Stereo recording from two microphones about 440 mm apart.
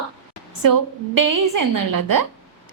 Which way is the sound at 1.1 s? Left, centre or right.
Right.